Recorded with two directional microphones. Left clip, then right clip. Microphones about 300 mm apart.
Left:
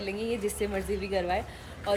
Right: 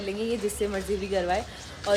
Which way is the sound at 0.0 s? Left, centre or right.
Centre.